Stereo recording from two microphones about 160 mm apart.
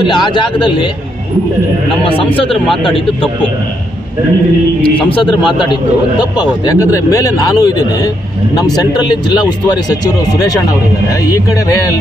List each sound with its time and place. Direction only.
0.0 s speech: 30° left (ahead or behind)
5.1 s speech: 30° left (ahead or behind)
8.7 s speech: 25° left (ahead or behind)